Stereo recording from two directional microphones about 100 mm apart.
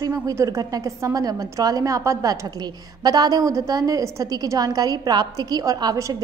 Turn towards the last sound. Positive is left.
turn(degrees=-40)  # may be behind; listen again after turning